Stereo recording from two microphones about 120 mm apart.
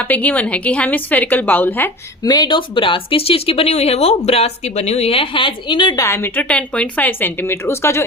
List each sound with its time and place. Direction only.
0.1 s a woman's voice: 10° left (ahead or behind)
2.2 s speech: 35° left (ahead or behind)
6.0 s speech: 20° left (ahead or behind)